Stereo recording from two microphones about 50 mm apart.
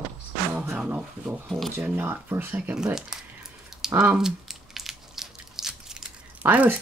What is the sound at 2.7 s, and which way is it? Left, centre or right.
Speech, centre.